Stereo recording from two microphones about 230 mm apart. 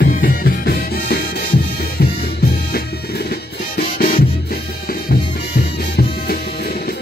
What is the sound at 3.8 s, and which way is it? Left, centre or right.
Music, left.